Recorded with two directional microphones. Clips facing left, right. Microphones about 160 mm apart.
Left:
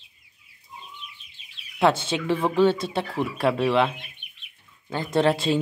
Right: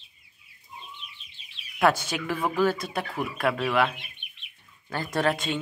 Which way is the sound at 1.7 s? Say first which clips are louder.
Left 2 dB; 25° left (ahead or behind).